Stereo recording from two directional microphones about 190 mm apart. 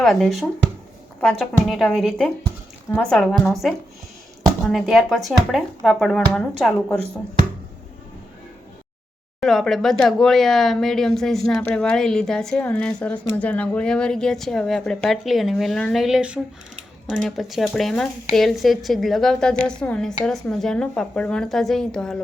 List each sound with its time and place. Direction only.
0.0 s speech: centre (ahead or behind)
9.4 s speech: centre (ahead or behind)